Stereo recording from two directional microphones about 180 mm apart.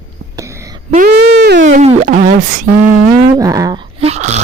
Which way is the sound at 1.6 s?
40° right (ahead or behind).